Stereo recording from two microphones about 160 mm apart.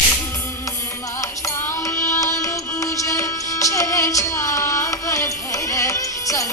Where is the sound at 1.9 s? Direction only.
20° left (ahead or behind).